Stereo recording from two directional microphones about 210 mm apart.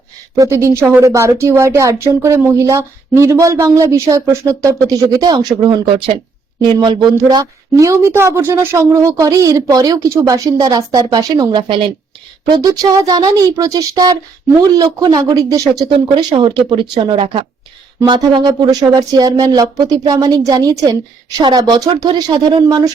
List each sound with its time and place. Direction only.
0.3 s speech: 15° right (ahead or behind)